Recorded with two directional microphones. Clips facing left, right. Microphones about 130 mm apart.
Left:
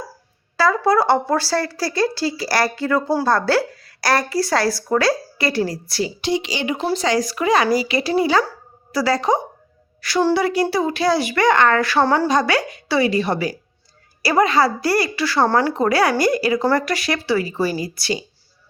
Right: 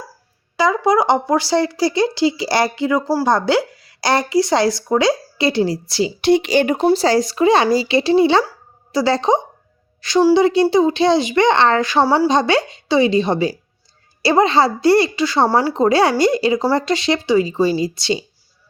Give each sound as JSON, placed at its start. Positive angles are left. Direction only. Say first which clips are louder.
{"t": 0.5, "sound": "speech", "louder": "right 1 dB", "side_deg": -15}
{"t": 6.2, "sound": "speech", "louder": "right 10 dB", "side_deg": -55}
{"t": 6.8, "sound": "a woman's voice", "louder": "right 5 dB", "side_deg": -35}